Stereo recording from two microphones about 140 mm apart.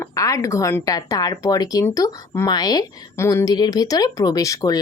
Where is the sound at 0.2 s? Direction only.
25° left (ahead or behind).